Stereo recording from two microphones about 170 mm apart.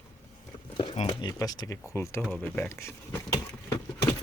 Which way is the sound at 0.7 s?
35° left (ahead or behind).